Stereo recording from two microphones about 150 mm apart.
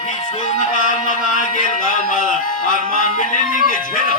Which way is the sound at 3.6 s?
65° left (ahead or behind).